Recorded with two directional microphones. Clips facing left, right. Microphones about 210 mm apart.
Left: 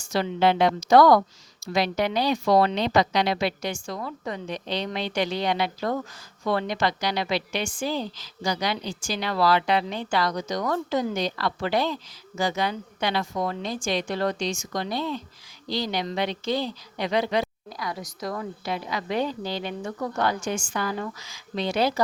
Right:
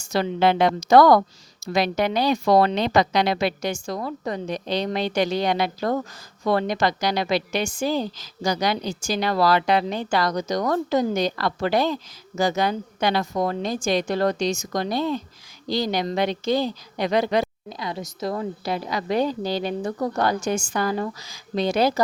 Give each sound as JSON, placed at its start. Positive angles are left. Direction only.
{"t": 0.0, "sound": "a woman's voice", "side_deg": -45}
{"t": 17.7, "sound": "a woman's voice", "side_deg": -25}